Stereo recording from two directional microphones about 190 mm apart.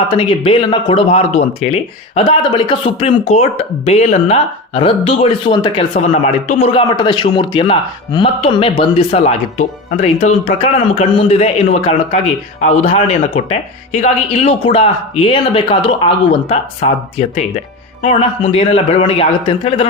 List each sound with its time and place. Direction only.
0.3 s speech: 25° left (ahead or behind)
5.9 s a man's voice: 35° left (ahead or behind)